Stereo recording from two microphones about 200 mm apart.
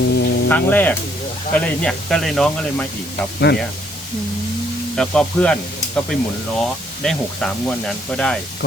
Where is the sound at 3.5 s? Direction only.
60° left (ahead or behind).